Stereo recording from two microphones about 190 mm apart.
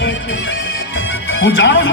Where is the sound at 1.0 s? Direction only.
75° left (ahead or behind).